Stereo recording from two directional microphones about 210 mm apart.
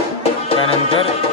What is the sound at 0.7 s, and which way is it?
Music, 25° left (ahead or behind).